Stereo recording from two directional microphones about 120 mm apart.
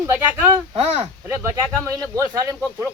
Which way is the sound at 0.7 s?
60° right (ahead or behind).